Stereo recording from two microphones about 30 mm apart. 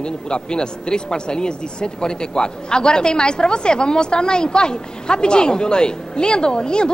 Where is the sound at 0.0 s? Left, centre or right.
Left.